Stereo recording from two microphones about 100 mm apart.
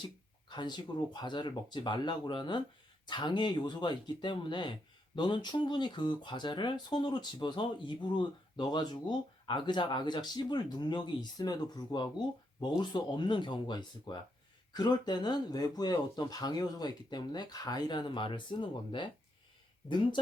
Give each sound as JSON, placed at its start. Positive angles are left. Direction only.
{"t": 0.0, "sound": "speech", "side_deg": 50}